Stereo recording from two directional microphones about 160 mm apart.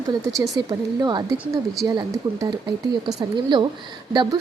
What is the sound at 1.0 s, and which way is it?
A woman's voice, 25° right (ahead or behind).